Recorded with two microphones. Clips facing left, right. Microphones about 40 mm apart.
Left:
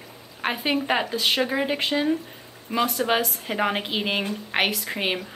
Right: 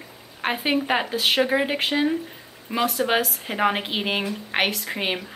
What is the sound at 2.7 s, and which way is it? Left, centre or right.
Speech, right.